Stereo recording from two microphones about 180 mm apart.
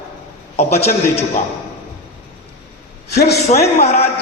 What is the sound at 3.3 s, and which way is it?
Speech, 35° left (ahead or behind).